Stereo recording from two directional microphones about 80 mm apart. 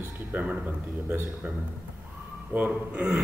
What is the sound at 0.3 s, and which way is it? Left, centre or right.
Speech, centre.